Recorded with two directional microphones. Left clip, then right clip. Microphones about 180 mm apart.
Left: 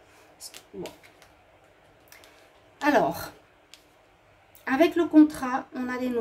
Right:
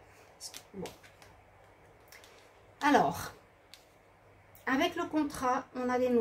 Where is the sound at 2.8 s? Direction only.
45° left (ahead or behind).